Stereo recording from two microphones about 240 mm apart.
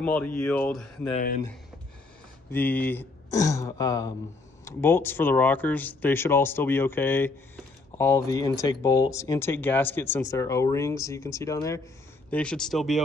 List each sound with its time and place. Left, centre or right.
0.0 s speech: centre
1.1 s speech: left
2.5 s speech: centre